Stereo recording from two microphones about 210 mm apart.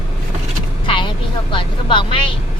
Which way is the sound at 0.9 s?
25° left (ahead or behind).